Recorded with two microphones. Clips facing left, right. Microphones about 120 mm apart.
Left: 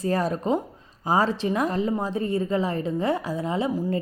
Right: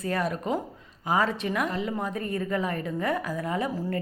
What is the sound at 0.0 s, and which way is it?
A woman's voice, 35° left (ahead or behind).